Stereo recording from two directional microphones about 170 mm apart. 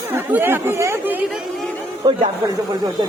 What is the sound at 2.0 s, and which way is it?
Speech, 25° right (ahead or behind).